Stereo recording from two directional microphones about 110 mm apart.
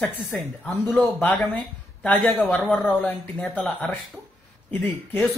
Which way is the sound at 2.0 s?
15° left (ahead or behind).